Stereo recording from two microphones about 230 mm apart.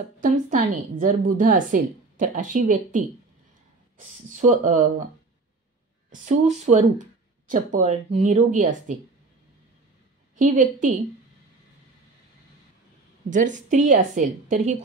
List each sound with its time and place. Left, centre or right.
0.2 s a woman's voice: right
4.3 s a woman's voice: right
6.2 s a woman's voice: right
10.3 s a woman's voice: right
13.3 s a woman's voice: right